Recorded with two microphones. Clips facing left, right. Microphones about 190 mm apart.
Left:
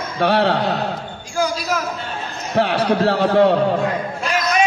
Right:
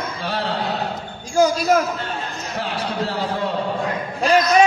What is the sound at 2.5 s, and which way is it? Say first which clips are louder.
A man's voice: left 9 dB; 65° left (ahead or behind).